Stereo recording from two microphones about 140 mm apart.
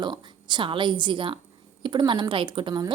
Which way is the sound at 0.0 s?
35° right (ahead or behind).